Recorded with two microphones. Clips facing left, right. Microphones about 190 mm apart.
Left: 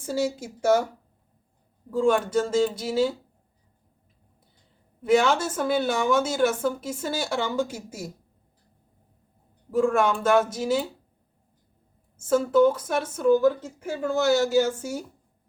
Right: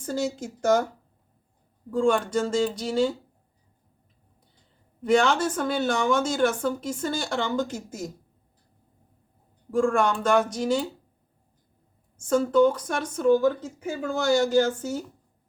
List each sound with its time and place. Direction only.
0.0 s speech: 10° left (ahead or behind)
1.9 s speech: 5° left (ahead or behind)
5.0 s speech: 5° left (ahead or behind)
9.7 s speech: 5° left (ahead or behind)
12.1 s speech: 5° left (ahead or behind)